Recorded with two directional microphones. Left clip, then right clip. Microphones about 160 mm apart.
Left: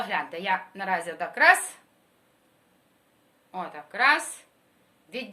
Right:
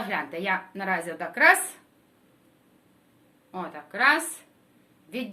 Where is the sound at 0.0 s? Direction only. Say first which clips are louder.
Even; 15° left (ahead or behind).